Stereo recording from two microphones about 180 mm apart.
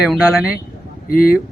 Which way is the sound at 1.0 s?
55° left (ahead or behind).